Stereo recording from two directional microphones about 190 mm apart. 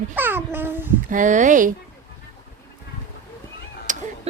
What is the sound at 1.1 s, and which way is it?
Speech, 40° right (ahead or behind).